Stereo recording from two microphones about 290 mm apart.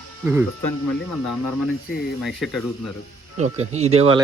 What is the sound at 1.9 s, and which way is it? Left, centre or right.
Speech, left.